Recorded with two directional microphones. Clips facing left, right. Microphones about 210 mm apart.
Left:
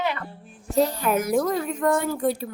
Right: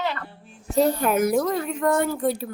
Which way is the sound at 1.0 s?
55° right (ahead or behind).